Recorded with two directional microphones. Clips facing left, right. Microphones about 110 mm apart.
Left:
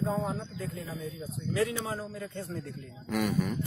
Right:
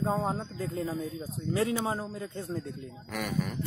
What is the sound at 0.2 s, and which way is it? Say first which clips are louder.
Speech: right 2 dB; 35° right (ahead or behind).